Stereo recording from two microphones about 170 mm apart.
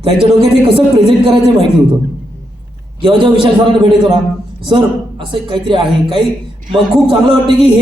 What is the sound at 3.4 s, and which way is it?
A man's voice, 30° right (ahead or behind).